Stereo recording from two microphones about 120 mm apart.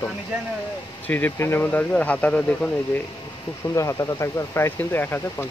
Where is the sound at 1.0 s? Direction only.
15° left (ahead or behind).